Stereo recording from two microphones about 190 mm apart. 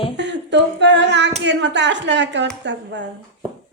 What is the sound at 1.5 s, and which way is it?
Speech, 65° right (ahead or behind).